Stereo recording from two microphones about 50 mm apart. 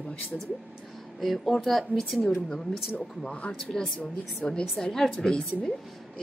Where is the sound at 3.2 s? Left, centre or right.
Centre.